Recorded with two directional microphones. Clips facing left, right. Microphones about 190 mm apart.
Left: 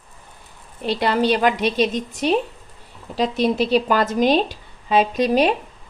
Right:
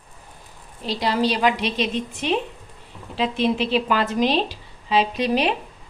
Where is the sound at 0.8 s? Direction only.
60° left (ahead or behind); by 5.5 s 45° left (ahead or behind).